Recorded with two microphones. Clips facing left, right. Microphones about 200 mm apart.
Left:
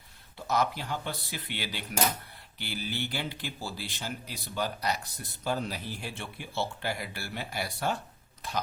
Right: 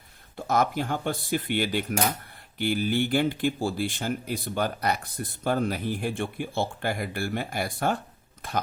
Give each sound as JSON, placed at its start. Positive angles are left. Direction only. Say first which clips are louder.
{"t": 0.3, "sound": "speech", "louder": "right 5 dB", "side_deg": -50}